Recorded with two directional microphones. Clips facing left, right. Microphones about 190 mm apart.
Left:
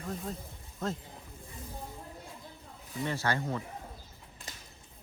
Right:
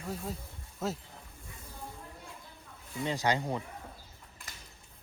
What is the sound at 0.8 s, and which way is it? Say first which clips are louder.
Speech: even; 5° right (ahead or behind).